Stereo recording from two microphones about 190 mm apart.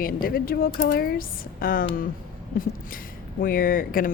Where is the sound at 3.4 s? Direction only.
50° left (ahead or behind).